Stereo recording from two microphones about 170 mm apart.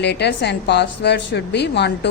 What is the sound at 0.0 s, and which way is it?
A woman's voice, 80° left.